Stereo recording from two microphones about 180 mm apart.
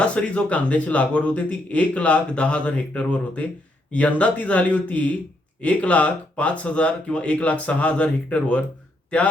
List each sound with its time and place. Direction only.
0.0 s a man's voice: 5° left (ahead or behind)